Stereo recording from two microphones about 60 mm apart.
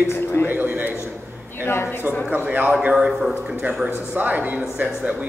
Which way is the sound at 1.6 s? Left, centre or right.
Left.